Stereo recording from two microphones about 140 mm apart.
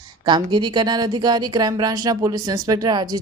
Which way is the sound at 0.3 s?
35° right (ahead or behind).